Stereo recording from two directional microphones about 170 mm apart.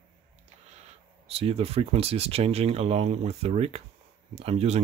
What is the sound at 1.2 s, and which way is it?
Speech, 35° right (ahead or behind).